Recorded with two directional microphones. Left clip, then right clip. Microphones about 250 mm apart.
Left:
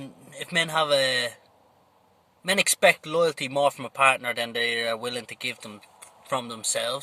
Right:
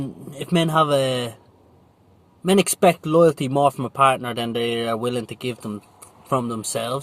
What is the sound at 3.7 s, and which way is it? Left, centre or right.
Speech, centre.